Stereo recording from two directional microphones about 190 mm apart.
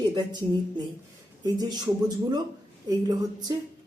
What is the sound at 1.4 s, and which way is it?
Speech, 20° right (ahead or behind).